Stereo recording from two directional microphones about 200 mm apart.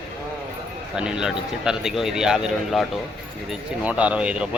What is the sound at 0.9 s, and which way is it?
A man's voice, 5° right (ahead or behind).